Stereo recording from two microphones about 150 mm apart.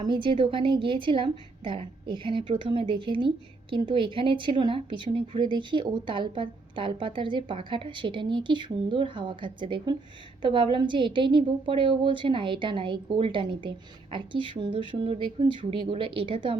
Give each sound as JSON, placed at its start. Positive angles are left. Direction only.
{"t": 0.0, "sound": "a woman's voice", "side_deg": -35}